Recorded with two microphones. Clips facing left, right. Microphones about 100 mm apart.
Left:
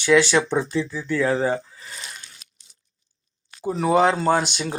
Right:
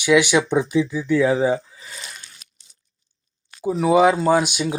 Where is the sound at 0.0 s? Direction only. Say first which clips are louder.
Right 1 dB; 15° right (ahead or behind).